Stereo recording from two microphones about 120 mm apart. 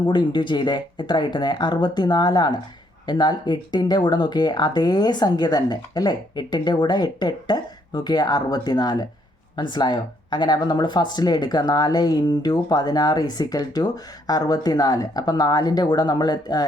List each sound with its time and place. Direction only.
0.1 s speech: 40° left (ahead or behind)